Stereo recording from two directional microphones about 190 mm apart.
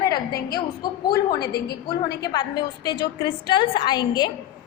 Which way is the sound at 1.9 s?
20° left (ahead or behind).